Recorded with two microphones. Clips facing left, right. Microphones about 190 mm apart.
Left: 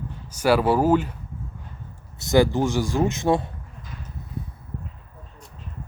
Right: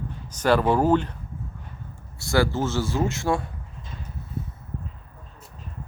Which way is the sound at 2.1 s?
20° left (ahead or behind).